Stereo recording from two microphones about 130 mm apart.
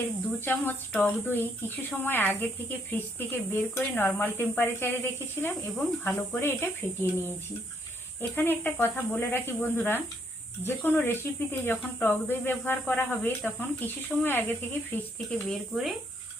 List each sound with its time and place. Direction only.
0.3 s speech: 15° left (ahead or behind)
15.4 s speech: centre (ahead or behind)